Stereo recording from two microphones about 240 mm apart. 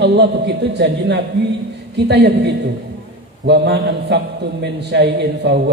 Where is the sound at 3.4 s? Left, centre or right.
Right.